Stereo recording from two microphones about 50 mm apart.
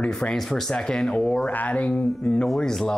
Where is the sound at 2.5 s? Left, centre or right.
Centre.